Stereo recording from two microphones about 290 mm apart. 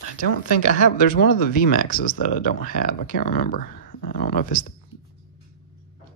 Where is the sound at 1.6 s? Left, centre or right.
Left.